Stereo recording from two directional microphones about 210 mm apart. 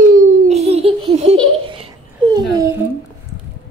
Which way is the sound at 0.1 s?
30° right (ahead or behind).